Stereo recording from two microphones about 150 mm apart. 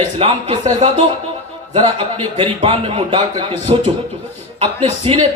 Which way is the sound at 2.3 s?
40° right (ahead or behind).